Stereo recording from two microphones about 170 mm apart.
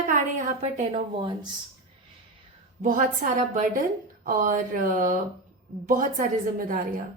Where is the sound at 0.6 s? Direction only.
35° right (ahead or behind).